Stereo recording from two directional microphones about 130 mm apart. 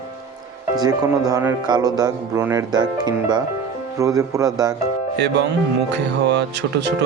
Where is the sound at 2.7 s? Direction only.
30° right (ahead or behind).